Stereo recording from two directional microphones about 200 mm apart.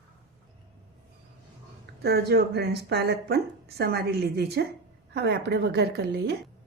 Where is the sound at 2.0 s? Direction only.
50° right (ahead or behind).